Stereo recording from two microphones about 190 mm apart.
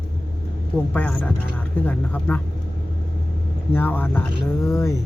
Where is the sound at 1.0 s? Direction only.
5° left (ahead or behind).